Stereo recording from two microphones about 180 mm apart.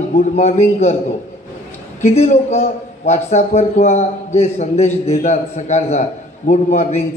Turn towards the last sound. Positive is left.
turn(degrees=40)  # may be behind; listen again after turning